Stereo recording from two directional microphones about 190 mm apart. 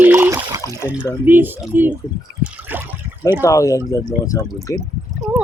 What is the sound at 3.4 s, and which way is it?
Speech, 15° left (ahead or behind).